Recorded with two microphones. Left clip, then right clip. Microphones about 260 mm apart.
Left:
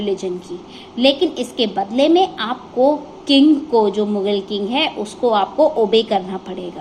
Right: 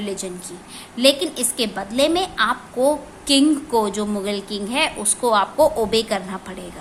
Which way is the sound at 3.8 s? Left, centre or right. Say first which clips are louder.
Left 5 dB; right.